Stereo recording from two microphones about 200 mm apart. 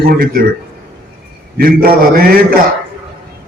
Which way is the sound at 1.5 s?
50° right (ahead or behind).